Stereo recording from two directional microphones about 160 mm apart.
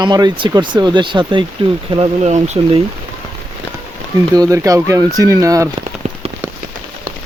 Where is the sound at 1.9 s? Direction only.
40° right (ahead or behind).